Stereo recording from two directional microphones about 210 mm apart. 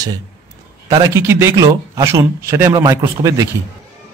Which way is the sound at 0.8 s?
15° right (ahead or behind).